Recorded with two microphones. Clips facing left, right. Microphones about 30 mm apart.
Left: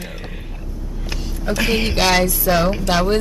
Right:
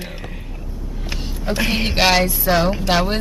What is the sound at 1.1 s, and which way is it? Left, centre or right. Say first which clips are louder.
Vehicle: even; centre.